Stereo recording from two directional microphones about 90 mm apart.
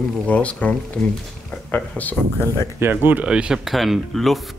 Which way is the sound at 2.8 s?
20° right (ahead or behind).